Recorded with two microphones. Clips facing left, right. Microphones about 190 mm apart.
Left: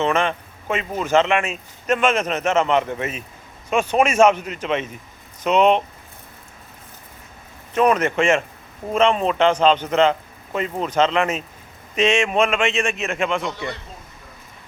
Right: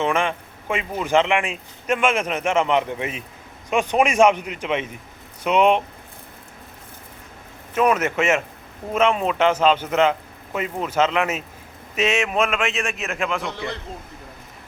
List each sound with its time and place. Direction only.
0.0 s speech: 10° right (ahead or behind)
7.8 s a man's voice: 5° right (ahead or behind)